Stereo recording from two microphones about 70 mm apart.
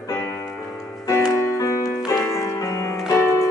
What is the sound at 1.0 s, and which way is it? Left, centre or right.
Music, left.